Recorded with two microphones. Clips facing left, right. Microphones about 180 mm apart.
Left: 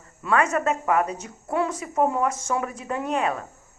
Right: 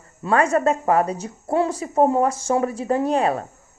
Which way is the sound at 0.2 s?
35° right (ahead or behind).